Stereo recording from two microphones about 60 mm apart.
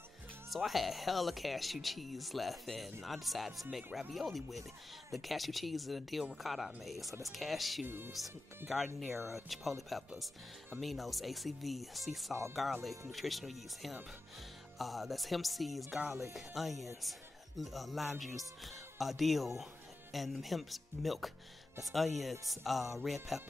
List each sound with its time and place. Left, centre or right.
0.5 s speech: centre
7.8 s speech: right
8.6 s speech: centre